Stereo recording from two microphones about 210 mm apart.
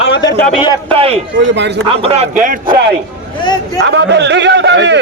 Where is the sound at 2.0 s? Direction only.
30° right (ahead or behind).